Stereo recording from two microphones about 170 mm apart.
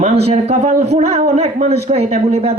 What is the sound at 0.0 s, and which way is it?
Speech, 35° right (ahead or behind).